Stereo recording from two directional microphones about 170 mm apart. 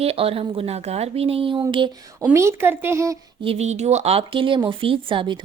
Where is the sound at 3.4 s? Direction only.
40° right (ahead or behind).